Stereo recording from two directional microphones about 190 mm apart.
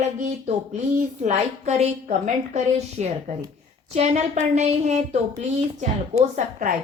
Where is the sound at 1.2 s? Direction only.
35° right (ahead or behind).